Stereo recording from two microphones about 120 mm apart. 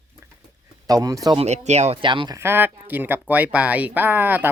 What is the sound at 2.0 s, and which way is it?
Speech, 40° right (ahead or behind).